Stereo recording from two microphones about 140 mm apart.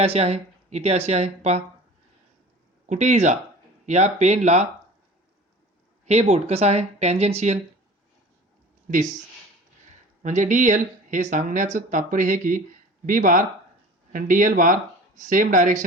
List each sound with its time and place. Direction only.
0.0 s speech: 45° right (ahead or behind)
2.8 s speech: 60° right (ahead or behind)
6.1 s speech: 50° right (ahead or behind)
10.2 s speech: 60° right (ahead or behind)